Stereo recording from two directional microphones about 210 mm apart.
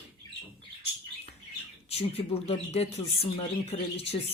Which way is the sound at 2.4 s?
30° left (ahead or behind).